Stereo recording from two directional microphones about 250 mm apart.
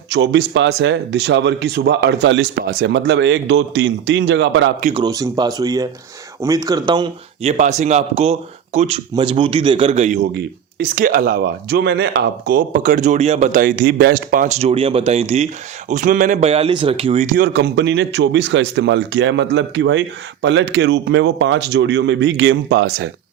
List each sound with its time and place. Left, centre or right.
0.1 s a man's voice: right
4.8 s speech: right
5.0 s speech: centre
7.5 s a man's voice: right